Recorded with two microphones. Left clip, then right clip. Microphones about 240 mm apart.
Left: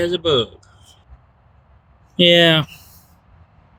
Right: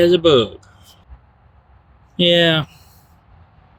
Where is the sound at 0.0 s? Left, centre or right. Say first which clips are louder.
Right 5 dB; right.